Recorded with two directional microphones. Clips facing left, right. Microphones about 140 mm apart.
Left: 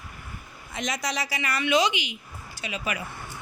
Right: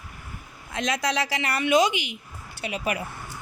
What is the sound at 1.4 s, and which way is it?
A woman's voice, 55° right (ahead or behind).